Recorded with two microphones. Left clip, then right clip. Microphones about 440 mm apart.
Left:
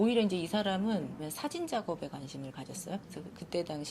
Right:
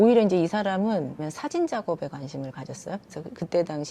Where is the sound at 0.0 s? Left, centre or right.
Right.